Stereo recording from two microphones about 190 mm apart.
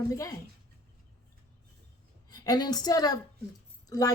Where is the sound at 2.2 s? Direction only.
20° left (ahead or behind).